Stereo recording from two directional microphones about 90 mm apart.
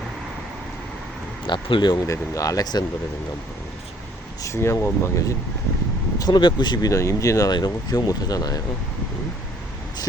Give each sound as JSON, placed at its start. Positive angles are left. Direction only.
{"t": 1.5, "sound": "speech", "side_deg": 60}
{"t": 2.0, "sound": "speech", "side_deg": 35}
{"t": 4.4, "sound": "speech", "side_deg": 30}
{"t": 6.1, "sound": "speech", "side_deg": 50}
{"t": 6.9, "sound": "speech", "side_deg": 35}
{"t": 7.5, "sound": "speech", "side_deg": 45}